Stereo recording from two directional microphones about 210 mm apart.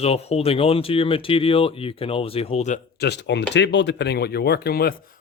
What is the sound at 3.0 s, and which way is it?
Speech, 55° left (ahead or behind).